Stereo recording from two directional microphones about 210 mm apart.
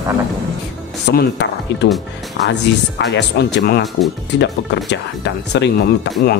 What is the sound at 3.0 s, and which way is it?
Speech, 55° left (ahead or behind).